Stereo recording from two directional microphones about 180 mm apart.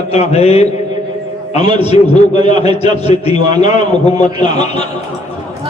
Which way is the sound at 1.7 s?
35° left (ahead or behind).